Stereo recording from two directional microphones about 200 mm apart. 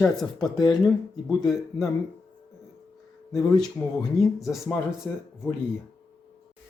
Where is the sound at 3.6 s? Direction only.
Centre (ahead or behind).